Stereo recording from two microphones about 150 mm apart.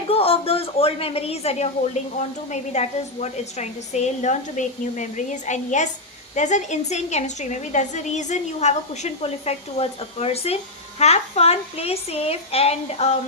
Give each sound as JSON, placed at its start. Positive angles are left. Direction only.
{"t": 0.1, "sound": "a woman's voice", "side_deg": 40}